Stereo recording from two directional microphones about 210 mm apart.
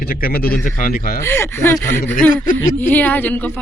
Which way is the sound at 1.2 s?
10° left (ahead or behind).